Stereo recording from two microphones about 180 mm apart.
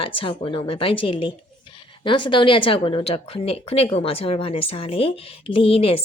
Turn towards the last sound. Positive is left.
turn(degrees=30)  # may be behind; listen again after turning